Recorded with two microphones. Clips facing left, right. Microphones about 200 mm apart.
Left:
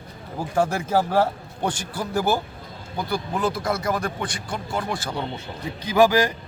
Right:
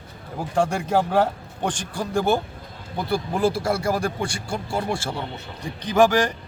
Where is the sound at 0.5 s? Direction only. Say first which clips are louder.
Even; 5° left (ahead or behind).